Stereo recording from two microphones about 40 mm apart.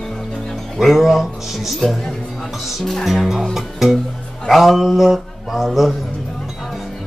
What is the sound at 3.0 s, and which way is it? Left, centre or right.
A man's voice, centre.